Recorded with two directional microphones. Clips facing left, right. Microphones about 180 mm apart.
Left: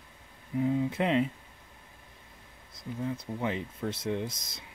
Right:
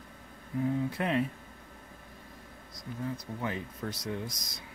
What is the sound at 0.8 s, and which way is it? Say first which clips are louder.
Speech: left 3 dB; 20° left (ahead or behind).